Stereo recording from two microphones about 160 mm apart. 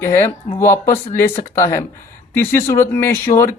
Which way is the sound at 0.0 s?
15° left (ahead or behind).